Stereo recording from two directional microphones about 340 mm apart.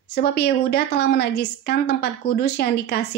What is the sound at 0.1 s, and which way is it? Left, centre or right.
A woman's voice, left.